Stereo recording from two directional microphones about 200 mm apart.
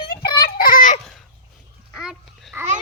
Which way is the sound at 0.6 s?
45° left (ahead or behind).